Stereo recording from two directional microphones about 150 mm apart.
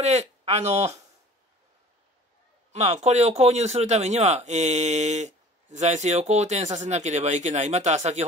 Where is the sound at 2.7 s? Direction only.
45° right (ahead or behind).